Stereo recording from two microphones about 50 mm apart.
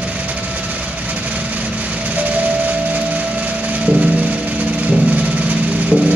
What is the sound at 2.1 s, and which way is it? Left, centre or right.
Music, right.